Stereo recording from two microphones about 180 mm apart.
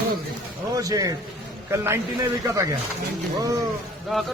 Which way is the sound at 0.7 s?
20° right (ahead or behind).